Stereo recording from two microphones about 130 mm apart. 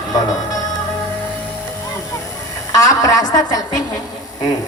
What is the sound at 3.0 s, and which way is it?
Speech, 30° left (ahead or behind).